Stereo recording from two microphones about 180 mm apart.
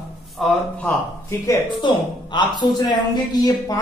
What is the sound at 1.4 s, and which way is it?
Speech, 20° left (ahead or behind).